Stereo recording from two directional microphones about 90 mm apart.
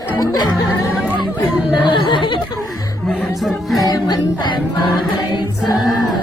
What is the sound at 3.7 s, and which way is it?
Music, 50° left (ahead or behind).